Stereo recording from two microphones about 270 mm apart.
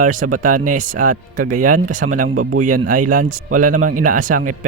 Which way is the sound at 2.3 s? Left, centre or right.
Right.